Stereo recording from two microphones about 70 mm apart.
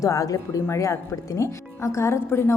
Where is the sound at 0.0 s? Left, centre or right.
Left.